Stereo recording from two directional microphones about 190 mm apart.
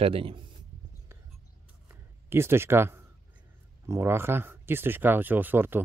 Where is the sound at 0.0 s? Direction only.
30° right (ahead or behind).